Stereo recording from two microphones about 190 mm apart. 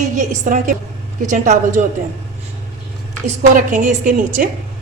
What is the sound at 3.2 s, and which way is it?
A woman's voice, 45° right (ahead or behind).